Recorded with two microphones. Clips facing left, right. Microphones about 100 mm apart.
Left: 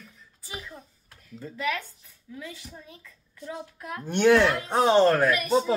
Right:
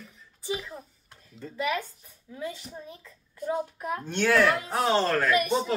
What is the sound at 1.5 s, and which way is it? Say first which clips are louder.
A child's voice: right 1 dB; 15° right (ahead or behind).